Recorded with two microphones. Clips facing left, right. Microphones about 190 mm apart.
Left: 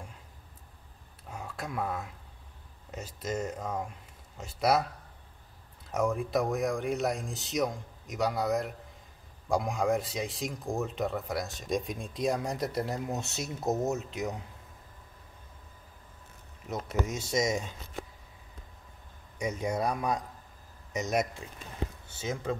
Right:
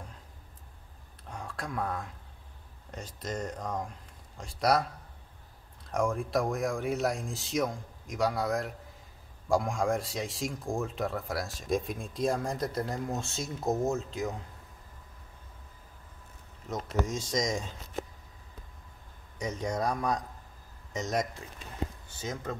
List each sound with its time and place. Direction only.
1.3 s a sound: 5° left (ahead or behind)
2.9 s speech: 5° left (ahead or behind)
5.9 s speech: 5° left (ahead or behind)
12.4 s speech: 20° left (ahead or behind)
16.6 s speech: 5° left (ahead or behind)
19.4 s speech: 10° left (ahead or behind)